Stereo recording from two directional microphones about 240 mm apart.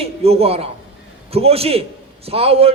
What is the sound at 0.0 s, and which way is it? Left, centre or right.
A man's voice, right.